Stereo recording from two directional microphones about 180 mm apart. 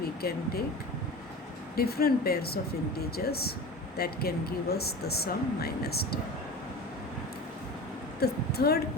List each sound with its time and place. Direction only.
0.2 s speech: 60° left (ahead or behind)
1.7 s speech: 60° left (ahead or behind)
8.2 s a woman's voice: 60° left (ahead or behind)